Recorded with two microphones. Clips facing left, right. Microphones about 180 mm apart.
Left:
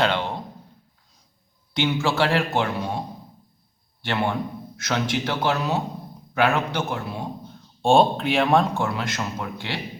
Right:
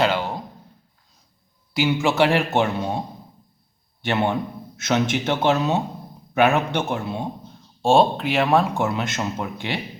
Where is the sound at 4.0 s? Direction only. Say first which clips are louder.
Right 3 dB; 20° right (ahead or behind).